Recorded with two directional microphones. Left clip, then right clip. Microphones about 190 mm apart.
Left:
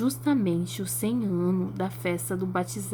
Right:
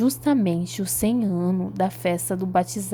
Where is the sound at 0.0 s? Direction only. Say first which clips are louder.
Right 4 dB; 30° right (ahead or behind).